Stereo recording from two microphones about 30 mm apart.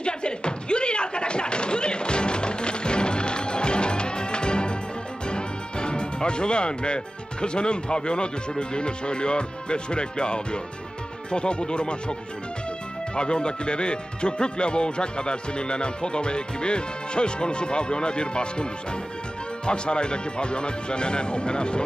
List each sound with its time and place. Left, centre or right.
0.0 s a sound: left
5.3 s music: left
7.4 s speech: left